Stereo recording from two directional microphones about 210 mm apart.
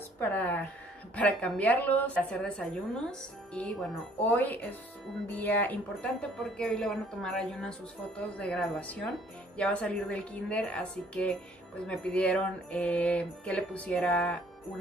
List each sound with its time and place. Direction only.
0.2 s a woman's voice: 10° left (ahead or behind)